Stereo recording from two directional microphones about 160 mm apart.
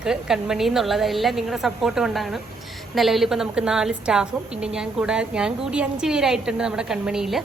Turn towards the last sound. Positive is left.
turn(degrees=-5)  # may be behind; listen again after turning